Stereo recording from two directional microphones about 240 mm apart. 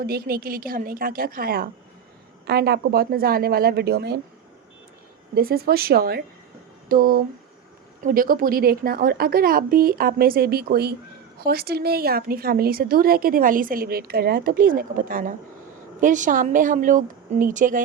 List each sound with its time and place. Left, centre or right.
0.0 s a woman's voice: right
5.3 s a woman's voice: right
6.8 s a sound: right
8.0 s a woman's voice: right